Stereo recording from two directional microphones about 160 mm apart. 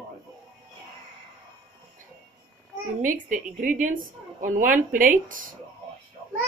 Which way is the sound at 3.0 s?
55° right (ahead or behind).